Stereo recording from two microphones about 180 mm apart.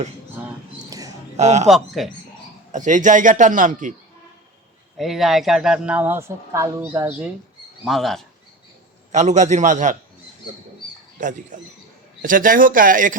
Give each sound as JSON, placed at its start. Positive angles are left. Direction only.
{"t": 0.9, "sound": "a sound", "side_deg": -20}
{"t": 1.4, "sound": "a man's voice", "side_deg": -40}
{"t": 1.6, "sound": "a man's voice", "side_deg": 0}
{"t": 2.7, "sound": "a man's voice", "side_deg": -45}
{"t": 4.9, "sound": "speech", "side_deg": 0}
{"t": 7.9, "sound": "a man's voice", "side_deg": 0}
{"t": 9.1, "sound": "a man's voice", "side_deg": -40}
{"t": 11.2, "sound": "a man's voice", "side_deg": -45}